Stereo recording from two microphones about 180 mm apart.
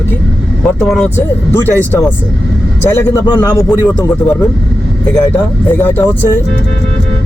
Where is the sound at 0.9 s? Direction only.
5° left (ahead or behind).